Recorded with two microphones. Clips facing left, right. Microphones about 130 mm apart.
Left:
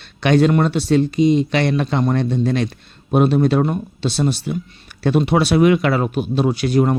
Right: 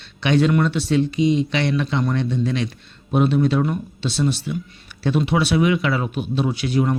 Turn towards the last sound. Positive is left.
turn(degrees=45)  # may be behind; listen again after turning